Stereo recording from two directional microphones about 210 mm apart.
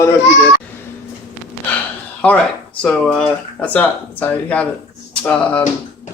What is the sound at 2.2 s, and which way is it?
Speech, 5° left (ahead or behind).